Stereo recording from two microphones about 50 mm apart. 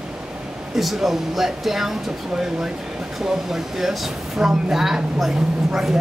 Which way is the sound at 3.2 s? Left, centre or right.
Centre.